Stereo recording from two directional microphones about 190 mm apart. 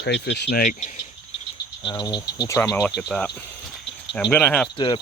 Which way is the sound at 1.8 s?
20° left (ahead or behind).